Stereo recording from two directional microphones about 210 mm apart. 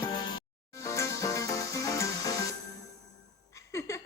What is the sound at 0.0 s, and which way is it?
Music, 20° left (ahead or behind).